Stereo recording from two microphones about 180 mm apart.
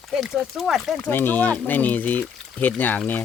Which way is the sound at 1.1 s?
10° left (ahead or behind).